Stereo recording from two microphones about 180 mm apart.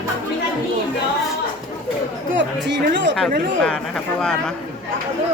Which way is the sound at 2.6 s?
80° right.